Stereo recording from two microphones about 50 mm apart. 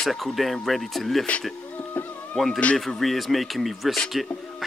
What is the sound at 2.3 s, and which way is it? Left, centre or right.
Speech, centre.